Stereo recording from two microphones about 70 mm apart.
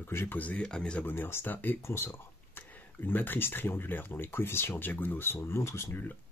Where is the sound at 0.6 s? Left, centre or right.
Centre.